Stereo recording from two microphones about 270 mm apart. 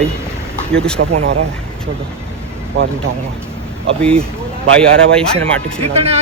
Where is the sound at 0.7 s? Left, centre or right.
Centre.